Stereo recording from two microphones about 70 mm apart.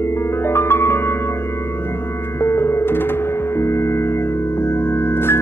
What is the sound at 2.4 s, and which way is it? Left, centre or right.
Music, left.